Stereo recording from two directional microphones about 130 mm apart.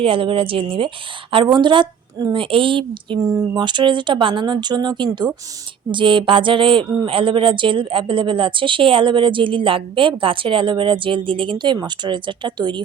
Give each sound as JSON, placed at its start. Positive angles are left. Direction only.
{"t": 0.0, "sound": "speech", "side_deg": -45}